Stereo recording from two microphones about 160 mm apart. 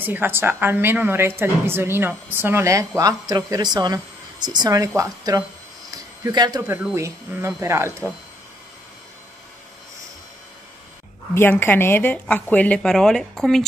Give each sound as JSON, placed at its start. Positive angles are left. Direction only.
{"t": 0.0, "sound": "a woman's voice", "side_deg": -10}
{"t": 5.9, "sound": "a sound", "side_deg": -20}
{"t": 6.6, "sound": "a woman's voice", "side_deg": -10}
{"t": 11.3, "sound": "a woman's voice", "side_deg": 10}